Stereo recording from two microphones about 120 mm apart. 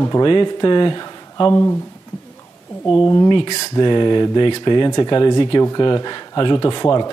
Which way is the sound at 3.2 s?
45° left (ahead or behind).